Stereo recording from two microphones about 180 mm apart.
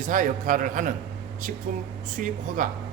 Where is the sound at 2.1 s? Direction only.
45° right (ahead or behind).